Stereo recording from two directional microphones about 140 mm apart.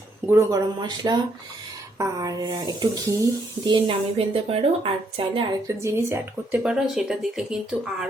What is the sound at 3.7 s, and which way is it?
Speech, 35° right (ahead or behind).